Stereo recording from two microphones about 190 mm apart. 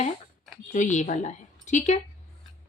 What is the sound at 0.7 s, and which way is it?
A woman's voice, 40° left (ahead or behind).